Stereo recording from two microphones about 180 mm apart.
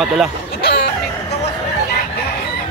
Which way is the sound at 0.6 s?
65° left (ahead or behind).